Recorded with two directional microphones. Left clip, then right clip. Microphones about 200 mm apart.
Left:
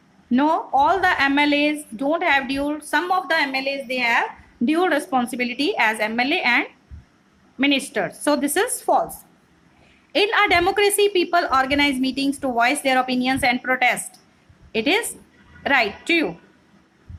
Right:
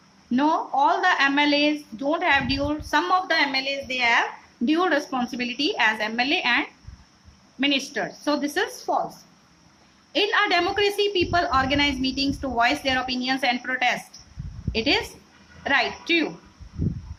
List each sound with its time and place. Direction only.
0.3 s a woman's voice: 20° left (ahead or behind)
10.1 s a woman's voice: 25° left (ahead or behind)